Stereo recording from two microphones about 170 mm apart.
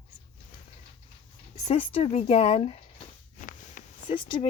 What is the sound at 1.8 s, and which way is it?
Speech, 30° left (ahead or behind).